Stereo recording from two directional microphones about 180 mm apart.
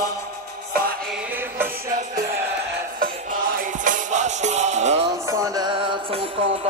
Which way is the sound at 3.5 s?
45° right (ahead or behind).